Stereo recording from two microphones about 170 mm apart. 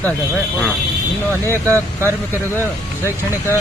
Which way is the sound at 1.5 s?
15° right (ahead or behind).